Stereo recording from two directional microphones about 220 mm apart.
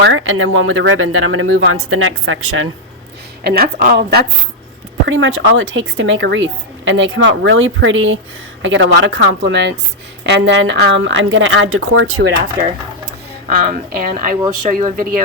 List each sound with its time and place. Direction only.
0.0 s speech: 60° right (ahead or behind)
3.4 s a woman's voice: 45° right (ahead or behind)
5.0 s speech: 60° right (ahead or behind); by 12.2 s 75° right (ahead or behind)
13.5 s speech: 40° right (ahead or behind)